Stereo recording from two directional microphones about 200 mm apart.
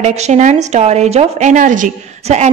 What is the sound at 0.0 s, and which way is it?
A woman's voice, 35° right (ahead or behind).